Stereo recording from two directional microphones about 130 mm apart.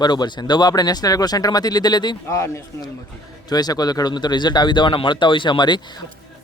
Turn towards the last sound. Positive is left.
turn(degrees=35)  # may be behind; listen again after turning